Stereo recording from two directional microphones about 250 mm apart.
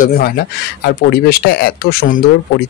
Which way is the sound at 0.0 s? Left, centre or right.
Left.